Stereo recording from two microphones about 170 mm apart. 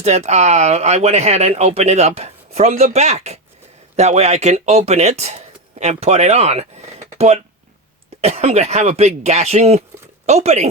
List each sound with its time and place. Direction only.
0.0 s speech: 40° right (ahead or behind)